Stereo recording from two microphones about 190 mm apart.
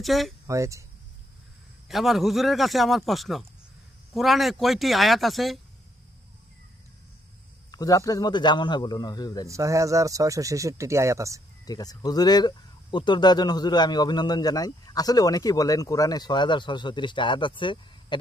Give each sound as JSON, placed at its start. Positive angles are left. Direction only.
{"t": 0.0, "sound": "speech", "side_deg": 0}
{"t": 0.5, "sound": "speech", "side_deg": -15}
{"t": 1.9, "sound": "speech", "side_deg": 0}
{"t": 7.7, "sound": "speech", "side_deg": 20}
{"t": 9.5, "sound": "speech", "side_deg": -15}
{"t": 11.6, "sound": "speech", "side_deg": 20}